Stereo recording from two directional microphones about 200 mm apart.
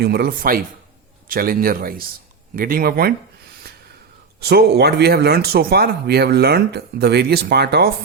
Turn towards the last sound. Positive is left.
turn(degrees=-55)  # may be behind; listen again after turning